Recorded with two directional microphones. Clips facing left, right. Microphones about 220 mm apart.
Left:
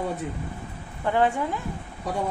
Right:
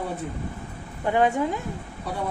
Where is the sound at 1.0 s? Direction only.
15° right (ahead or behind).